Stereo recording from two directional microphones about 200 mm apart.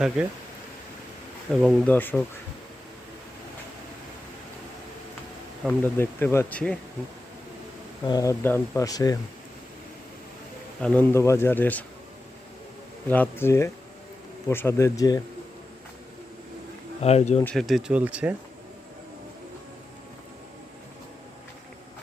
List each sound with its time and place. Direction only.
0.2 s speech: 5° right (ahead or behind)
1.5 s speech: centre (ahead or behind)
5.6 s speech: 10° left (ahead or behind)
8.0 s speech: 20° left (ahead or behind)
10.8 s speech: 5° left (ahead or behind)
13.1 s speech: 10° left (ahead or behind)
17.0 s speech: 30° left (ahead or behind)
17.4 s speech: centre (ahead or behind)